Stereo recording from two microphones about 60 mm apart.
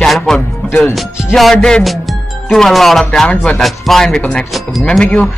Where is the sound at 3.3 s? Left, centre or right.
Centre.